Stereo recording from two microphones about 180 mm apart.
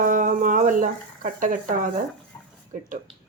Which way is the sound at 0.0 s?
45° right (ahead or behind).